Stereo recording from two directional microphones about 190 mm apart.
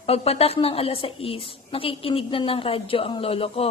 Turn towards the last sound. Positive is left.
turn(degrees=30)  # may be behind; listen again after turning